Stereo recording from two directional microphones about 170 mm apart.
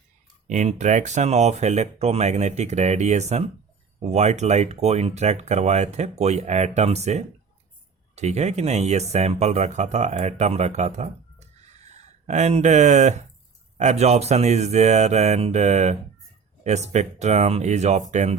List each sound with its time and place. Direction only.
0.4 s speech: 45° right (ahead or behind)